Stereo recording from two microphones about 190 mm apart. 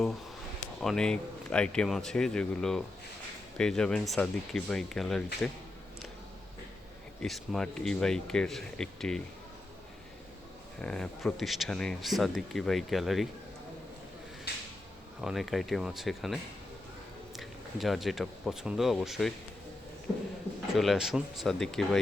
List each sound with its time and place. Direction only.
0.8 s speech: 5° left (ahead or behind)
7.2 s speech: centre (ahead or behind)
10.8 s speech: 5° left (ahead or behind)
14.5 s a sound: 60° left (ahead or behind)
15.2 s speech: centre (ahead or behind)
20.7 s speech: centre (ahead or behind)